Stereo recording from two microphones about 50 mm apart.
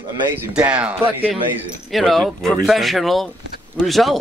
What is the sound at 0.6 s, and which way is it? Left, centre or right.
Speech, right.